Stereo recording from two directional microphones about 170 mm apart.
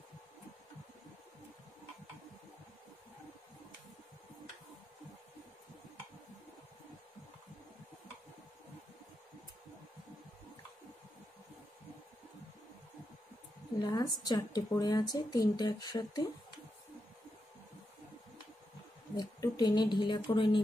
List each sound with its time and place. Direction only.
13.7 s a woman's voice: 25° left (ahead or behind)
19.1 s speech: 25° left (ahead or behind)